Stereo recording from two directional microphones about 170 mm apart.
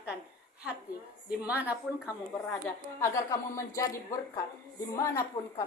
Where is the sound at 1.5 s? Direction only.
10° right (ahead or behind).